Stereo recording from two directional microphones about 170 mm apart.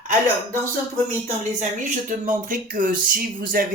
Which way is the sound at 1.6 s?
50° right (ahead or behind).